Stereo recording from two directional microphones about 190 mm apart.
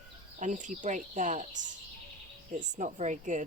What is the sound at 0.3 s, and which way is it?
A woman's voice, 40° right (ahead or behind).